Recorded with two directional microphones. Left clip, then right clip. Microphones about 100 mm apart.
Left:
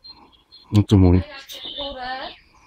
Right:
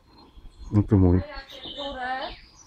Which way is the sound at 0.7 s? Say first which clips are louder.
Left 4 dB; 40° left (ahead or behind).